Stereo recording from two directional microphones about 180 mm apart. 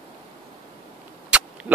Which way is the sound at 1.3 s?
5° right (ahead or behind).